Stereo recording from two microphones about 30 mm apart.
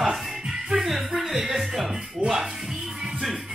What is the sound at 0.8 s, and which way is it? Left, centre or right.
Speech, centre.